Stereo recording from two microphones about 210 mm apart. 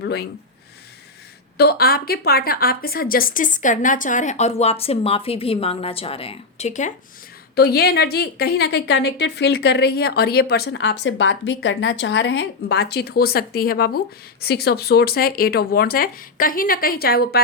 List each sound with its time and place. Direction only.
0.0 s speech: 50° left (ahead or behind)
1.5 s a woman's voice: 50° left (ahead or behind)
7.5 s a woman's voice: 50° left (ahead or behind)